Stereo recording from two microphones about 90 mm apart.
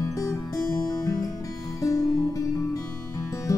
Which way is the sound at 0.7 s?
45° left (ahead or behind).